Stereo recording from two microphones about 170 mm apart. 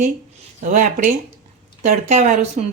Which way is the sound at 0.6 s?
50° right (ahead or behind).